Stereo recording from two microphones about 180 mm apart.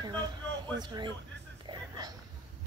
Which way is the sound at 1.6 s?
25° right (ahead or behind).